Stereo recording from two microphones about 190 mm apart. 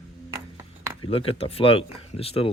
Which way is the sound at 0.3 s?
15° right (ahead or behind).